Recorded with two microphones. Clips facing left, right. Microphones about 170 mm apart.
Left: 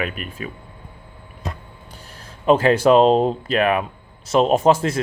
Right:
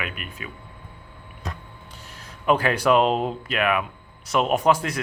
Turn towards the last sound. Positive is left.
turn(degrees=25)  # may be behind; listen again after turning